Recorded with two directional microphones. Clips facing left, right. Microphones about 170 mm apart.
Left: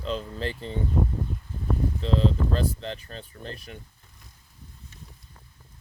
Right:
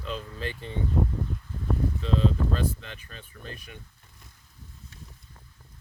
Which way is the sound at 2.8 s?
35° left (ahead or behind).